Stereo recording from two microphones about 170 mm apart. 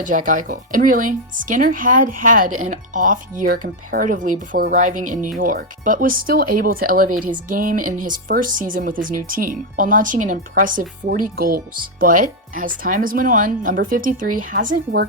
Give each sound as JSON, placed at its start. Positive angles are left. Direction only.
{"t": 0.0, "sound": "speech", "side_deg": -50}